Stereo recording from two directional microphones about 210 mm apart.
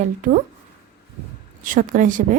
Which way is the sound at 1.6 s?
40° right (ahead or behind).